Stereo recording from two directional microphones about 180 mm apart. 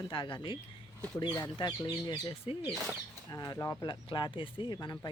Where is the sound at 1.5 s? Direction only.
25° left (ahead or behind).